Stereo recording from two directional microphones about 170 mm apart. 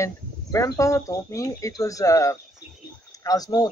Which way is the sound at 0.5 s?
20° left (ahead or behind).